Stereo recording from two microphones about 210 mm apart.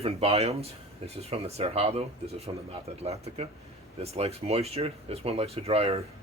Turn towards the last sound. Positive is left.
turn(degrees=-30)  # may be behind; listen again after turning